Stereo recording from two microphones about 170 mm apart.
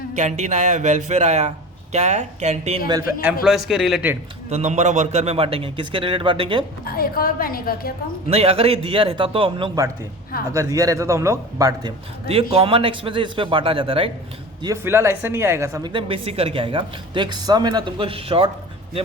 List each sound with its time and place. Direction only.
0.2 s a man's voice: 45° right (ahead or behind)
3.7 s speech: centre (ahead or behind)
4.4 s a man's voice: 40° right (ahead or behind)
6.8 s a woman's voice: 60° left (ahead or behind)
8.3 s a man's voice: 35° right (ahead or behind)
10.5 s a man's voice: 20° right (ahead or behind)
14.6 s speech: 15° right (ahead or behind)
15.9 s a man's voice: 30° right (ahead or behind)